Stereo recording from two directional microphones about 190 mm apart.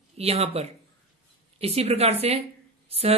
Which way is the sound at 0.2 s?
30° right (ahead or behind).